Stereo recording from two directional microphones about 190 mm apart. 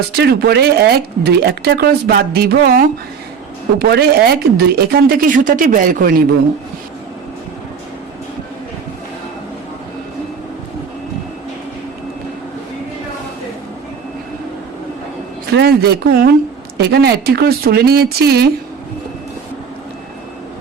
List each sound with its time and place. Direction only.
0.2 s speech: 55° right (ahead or behind)
15.5 s speech: 55° right (ahead or behind)